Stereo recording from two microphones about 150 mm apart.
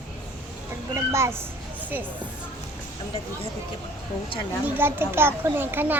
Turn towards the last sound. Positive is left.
turn(degrees=-10)  # may be behind; listen again after turning